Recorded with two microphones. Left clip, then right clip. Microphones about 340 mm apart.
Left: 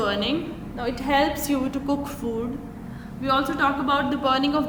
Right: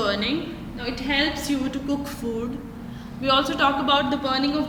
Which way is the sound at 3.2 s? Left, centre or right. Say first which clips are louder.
Right 2 dB; centre.